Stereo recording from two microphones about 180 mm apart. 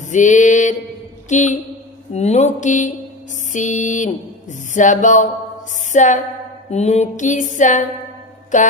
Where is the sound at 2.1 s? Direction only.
35° left (ahead or behind).